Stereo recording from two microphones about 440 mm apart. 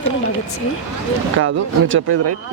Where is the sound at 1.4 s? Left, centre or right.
Right.